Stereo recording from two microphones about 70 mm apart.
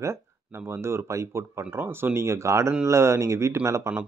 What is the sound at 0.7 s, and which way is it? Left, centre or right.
Speech, right.